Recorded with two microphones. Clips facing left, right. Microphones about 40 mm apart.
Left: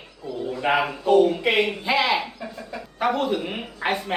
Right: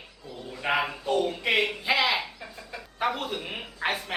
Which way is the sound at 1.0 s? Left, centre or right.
Left.